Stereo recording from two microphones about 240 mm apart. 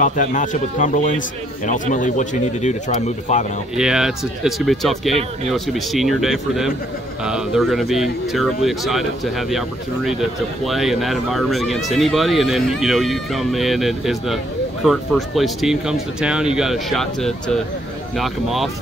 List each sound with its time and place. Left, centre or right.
0.0 s speech: left
3.7 s speech: centre